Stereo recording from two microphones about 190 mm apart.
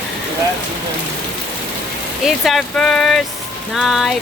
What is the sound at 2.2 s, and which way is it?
Speech, centre (ahead or behind).